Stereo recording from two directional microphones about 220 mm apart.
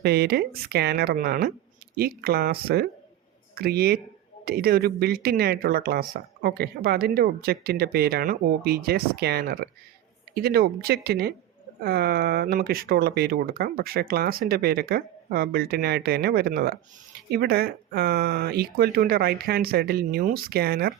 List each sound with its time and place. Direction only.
0.0 s speech: 45° right (ahead or behind)